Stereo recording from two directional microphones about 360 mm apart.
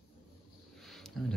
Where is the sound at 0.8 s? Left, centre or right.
Centre.